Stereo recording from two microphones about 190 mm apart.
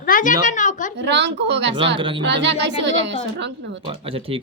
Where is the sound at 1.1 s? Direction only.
65° right (ahead or behind).